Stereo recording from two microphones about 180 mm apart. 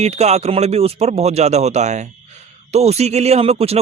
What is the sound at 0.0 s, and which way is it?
A man's voice, 35° right (ahead or behind).